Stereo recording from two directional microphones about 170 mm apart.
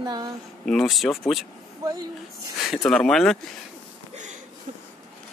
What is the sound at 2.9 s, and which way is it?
Speech, 5° left (ahead or behind).